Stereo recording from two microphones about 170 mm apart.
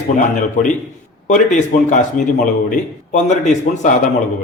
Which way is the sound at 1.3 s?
45° left (ahead or behind).